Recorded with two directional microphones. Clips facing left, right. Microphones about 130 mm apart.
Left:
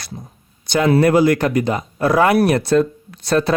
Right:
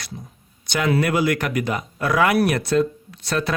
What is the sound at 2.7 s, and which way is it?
Speech, 45° left (ahead or behind).